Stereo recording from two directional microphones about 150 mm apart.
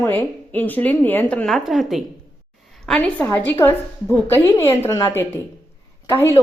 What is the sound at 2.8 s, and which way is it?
A woman's voice, 10° left (ahead or behind).